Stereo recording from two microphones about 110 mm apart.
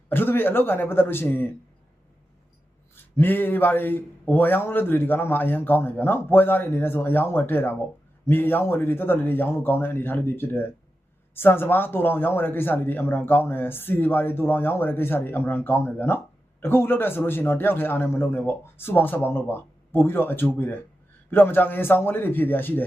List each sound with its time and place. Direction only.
0.1 s a man's voice: 20° left (ahead or behind)
2.9 s a man's voice: 20° left (ahead or behind)